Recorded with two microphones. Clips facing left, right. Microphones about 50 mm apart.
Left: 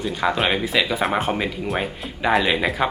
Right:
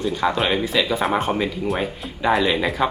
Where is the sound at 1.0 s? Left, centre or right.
Centre.